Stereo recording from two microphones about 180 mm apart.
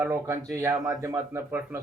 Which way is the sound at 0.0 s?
15° right (ahead or behind).